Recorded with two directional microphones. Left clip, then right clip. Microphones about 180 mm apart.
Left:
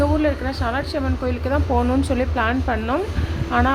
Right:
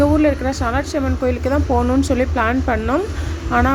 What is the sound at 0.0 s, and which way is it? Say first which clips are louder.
Speech: right 5 dB; 20° right (ahead or behind).